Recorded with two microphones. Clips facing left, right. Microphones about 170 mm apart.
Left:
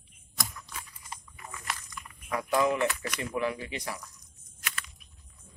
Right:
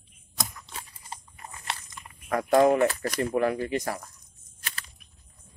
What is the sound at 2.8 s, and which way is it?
Speech, 40° right (ahead or behind).